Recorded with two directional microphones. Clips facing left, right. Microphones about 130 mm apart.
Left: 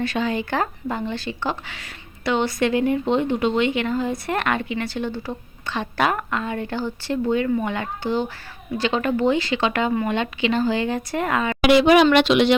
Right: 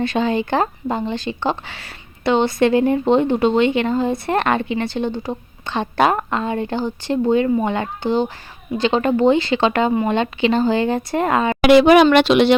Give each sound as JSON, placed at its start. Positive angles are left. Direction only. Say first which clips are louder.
{"t": 0.0, "sound": "speech", "louder": "right 4 dB", "side_deg": -25}
{"t": 11.6, "sound": "a woman's voice", "louder": "right 4 dB", "side_deg": -55}